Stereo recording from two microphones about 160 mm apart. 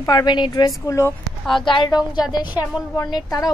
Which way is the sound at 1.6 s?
30° left (ahead or behind).